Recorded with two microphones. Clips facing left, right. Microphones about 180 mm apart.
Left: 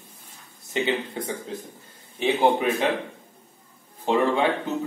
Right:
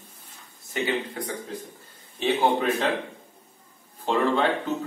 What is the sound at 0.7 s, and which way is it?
Speech, 25° left (ahead or behind).